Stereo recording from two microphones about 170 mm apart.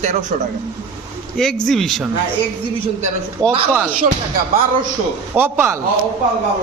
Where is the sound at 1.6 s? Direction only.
Centre (ahead or behind).